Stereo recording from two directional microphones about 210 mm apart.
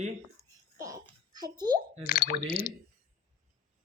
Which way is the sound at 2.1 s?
45° left (ahead or behind).